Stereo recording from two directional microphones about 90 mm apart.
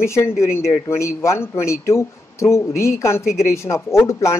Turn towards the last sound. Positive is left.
turn(degrees=30)  # may be behind; listen again after turning